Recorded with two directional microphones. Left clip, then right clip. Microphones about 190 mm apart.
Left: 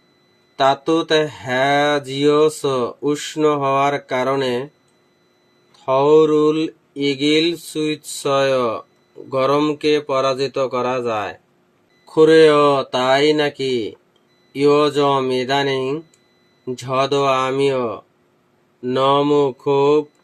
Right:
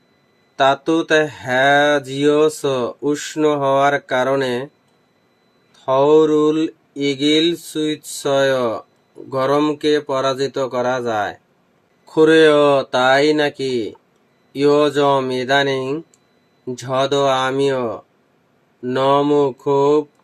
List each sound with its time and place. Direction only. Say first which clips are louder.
0.5 s speech: right 1 dB; 10° right (ahead or behind)
5.8 s speech: even; 15° right (ahead or behind)